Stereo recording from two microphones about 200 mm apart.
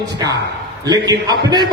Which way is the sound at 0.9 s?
20° right (ahead or behind).